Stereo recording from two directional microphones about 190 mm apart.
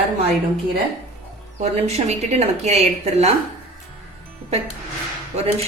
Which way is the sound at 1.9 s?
35° right (ahead or behind).